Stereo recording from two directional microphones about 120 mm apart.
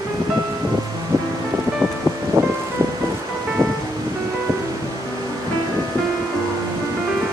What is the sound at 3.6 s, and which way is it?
Music, 25° right (ahead or behind).